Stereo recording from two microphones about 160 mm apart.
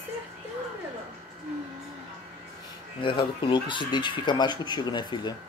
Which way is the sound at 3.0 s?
30° left (ahead or behind).